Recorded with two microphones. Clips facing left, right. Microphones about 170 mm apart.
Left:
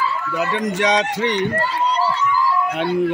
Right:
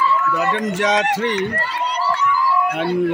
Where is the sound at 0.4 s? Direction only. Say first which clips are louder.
Right 1 dB; centre (ahead or behind).